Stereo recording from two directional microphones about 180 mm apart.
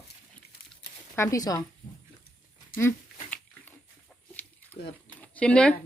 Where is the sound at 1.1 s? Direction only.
15° left (ahead or behind).